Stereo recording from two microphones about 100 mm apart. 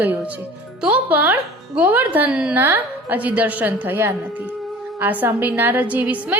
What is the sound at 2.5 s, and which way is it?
A woman's voice, 20° right (ahead or behind).